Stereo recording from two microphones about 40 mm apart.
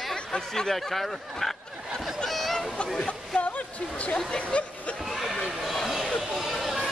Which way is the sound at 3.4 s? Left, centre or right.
Left.